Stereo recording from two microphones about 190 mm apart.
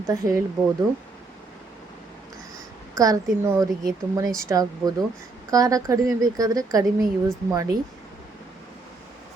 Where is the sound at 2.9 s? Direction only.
20° right (ahead or behind).